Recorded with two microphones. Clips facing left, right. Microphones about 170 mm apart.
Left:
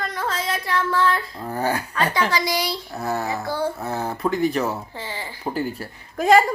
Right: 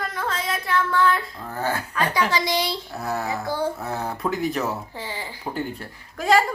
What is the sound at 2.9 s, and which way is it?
Speech, centre (ahead or behind).